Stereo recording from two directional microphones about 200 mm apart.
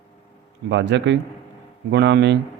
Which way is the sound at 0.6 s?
60° right (ahead or behind).